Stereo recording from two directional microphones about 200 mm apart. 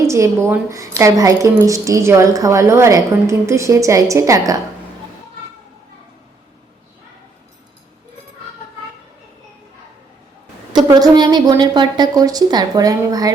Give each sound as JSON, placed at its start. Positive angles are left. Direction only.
{"t": 0.0, "sound": "a woman's voice", "side_deg": -15}
{"t": 10.7, "sound": "a woman's voice", "side_deg": -20}